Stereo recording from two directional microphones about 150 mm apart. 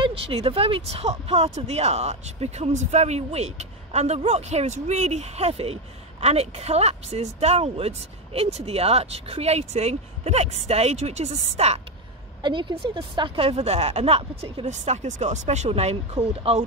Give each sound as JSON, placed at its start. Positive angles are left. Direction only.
{"t": 0.0, "sound": "speech", "side_deg": -40}
{"t": 12.4, "sound": "speech", "side_deg": -35}